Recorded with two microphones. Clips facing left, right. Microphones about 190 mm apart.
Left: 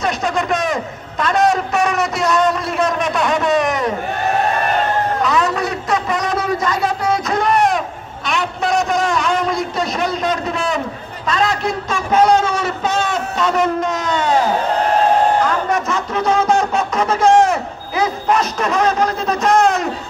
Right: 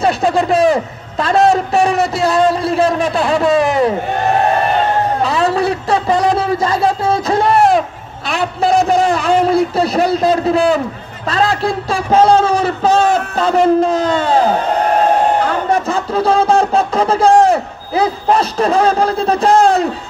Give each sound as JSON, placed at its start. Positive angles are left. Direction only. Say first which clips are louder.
{"t": 0.0, "sound": "speech", "louder": "right 6 dB", "side_deg": -30}
{"t": 5.2, "sound": "a sound", "louder": "right 3 dB", "side_deg": -30}
{"t": 11.2, "sound": "a man's voice", "louder": "right 3 dB", "side_deg": -35}
{"t": 15.7, "sound": "speech", "louder": "right 4 dB", "side_deg": -30}